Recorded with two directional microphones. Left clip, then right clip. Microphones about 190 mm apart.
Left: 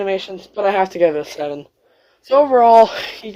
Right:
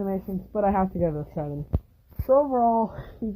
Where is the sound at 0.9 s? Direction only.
25° left (ahead or behind).